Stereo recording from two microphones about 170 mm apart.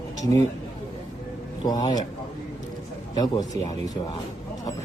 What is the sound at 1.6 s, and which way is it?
Speech, 20° left (ahead or behind).